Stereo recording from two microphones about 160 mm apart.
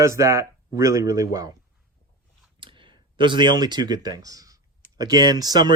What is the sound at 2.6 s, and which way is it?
Speech, 30° right (ahead or behind).